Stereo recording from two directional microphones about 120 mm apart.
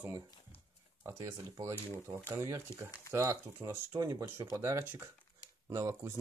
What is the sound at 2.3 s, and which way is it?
Speech, 25° right (ahead or behind).